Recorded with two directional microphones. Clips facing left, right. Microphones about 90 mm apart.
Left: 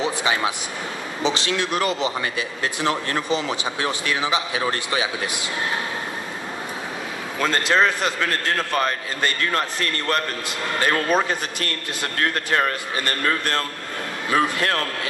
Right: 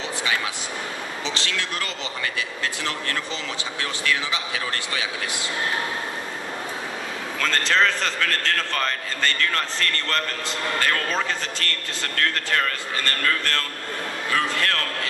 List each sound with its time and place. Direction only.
0.0 s a sound: 20° left (ahead or behind)
1.2 s a man's voice: 20° left (ahead or behind)
7.3 s a man's voice: 15° left (ahead or behind)